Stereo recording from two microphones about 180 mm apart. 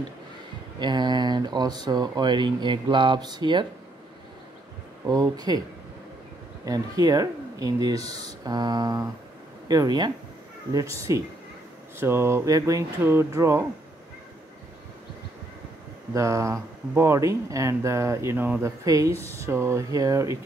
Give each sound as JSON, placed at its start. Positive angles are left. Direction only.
{"t": 0.7, "sound": "speech", "side_deg": -25}
{"t": 5.0, "sound": "speech", "side_deg": -20}
{"t": 6.6, "sound": "speech", "side_deg": -20}
{"t": 16.1, "sound": "speech", "side_deg": -15}